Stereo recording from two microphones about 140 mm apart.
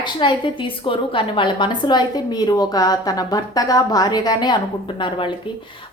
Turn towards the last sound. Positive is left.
turn(degrees=35)  # may be behind; listen again after turning